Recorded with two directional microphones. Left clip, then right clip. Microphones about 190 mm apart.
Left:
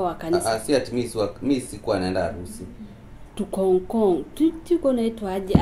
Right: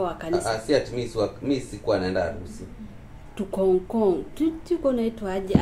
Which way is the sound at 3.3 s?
10° left (ahead or behind).